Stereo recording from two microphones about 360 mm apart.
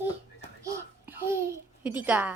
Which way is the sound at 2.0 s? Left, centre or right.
Centre.